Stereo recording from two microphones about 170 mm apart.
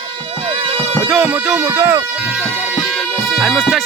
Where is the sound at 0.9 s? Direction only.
Centre (ahead or behind).